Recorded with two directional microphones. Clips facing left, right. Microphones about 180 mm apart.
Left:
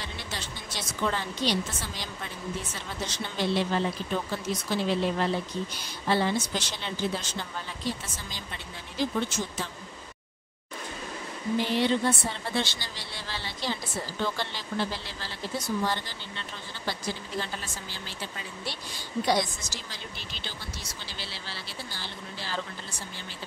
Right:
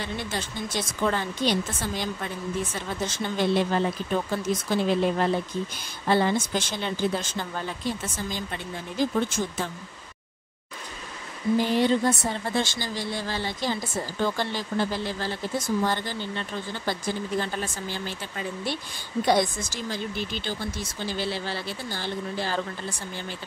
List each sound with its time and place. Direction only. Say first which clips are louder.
0.3 s speech: right 7 dB; 50° right (ahead or behind)
3.1 s speech: right 4 dB; 50° right (ahead or behind)
11.5 s speech: right 4 dB; 45° right (ahead or behind)
19.2 s speech: right 5 dB; 55° right (ahead or behind)